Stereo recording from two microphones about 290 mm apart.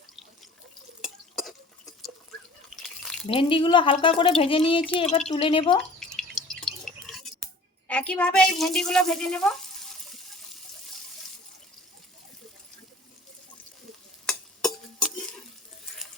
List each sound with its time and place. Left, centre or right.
1.0 s a sound: centre
3.2 s speech: centre
5.7 s drip: centre
14.3 s stir: centre